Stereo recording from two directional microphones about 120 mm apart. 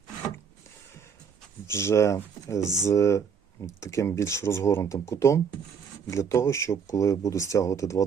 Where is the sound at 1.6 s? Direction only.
25° left (ahead or behind).